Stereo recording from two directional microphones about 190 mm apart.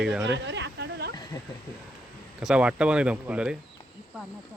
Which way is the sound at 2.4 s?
5° right (ahead or behind).